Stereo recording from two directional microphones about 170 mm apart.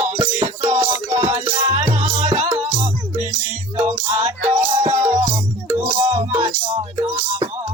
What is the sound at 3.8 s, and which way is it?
Music, 40° right (ahead or behind).